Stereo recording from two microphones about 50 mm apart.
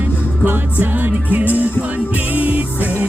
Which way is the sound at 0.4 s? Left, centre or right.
Right.